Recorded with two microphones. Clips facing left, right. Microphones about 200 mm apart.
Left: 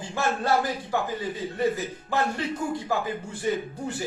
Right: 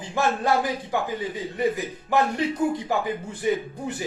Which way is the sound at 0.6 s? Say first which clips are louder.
Right 1 dB; 15° right (ahead or behind).